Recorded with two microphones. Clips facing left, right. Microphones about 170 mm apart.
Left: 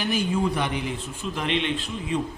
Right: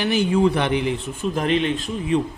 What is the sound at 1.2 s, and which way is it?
Speech, 45° right (ahead or behind).